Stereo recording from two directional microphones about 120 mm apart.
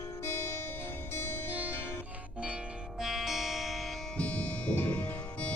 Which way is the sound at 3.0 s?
Centre (ahead or behind).